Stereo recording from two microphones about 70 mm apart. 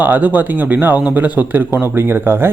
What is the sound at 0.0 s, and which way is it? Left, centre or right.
Speech, right.